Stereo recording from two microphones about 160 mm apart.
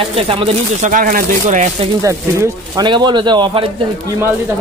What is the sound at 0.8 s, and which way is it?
Speech, 60° right (ahead or behind).